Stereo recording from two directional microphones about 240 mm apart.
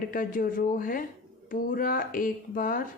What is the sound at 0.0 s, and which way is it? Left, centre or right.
Speech, left.